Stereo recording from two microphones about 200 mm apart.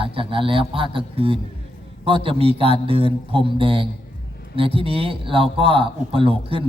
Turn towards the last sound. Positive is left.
turn(degrees=-25)  # may be behind; listen again after turning